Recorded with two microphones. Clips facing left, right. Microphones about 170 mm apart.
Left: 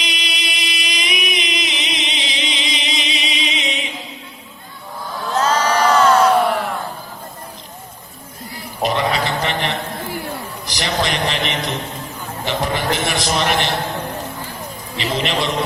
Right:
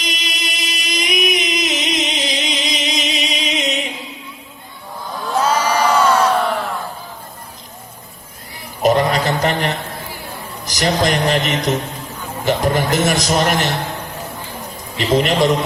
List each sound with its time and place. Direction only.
0.0 s music: 45° right (ahead or behind)
5.3 s a sound: 10° right (ahead or behind)
8.8 s a sound: 45° right (ahead or behind)
10.7 s music: 45° right (ahead or behind)
12.5 s a man's voice: 45° right (ahead or behind)
14.9 s a man's voice: 45° right (ahead or behind)